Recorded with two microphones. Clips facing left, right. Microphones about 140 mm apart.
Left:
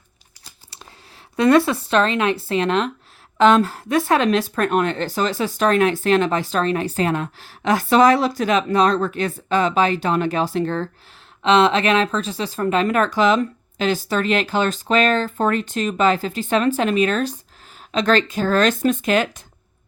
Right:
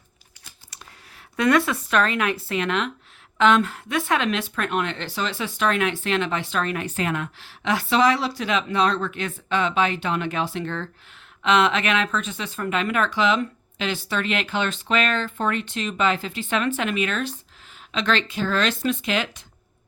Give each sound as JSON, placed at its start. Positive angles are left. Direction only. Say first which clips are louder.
{"t": 1.4, "sound": "speech", "louder": "left 5 dB", "side_deg": 30}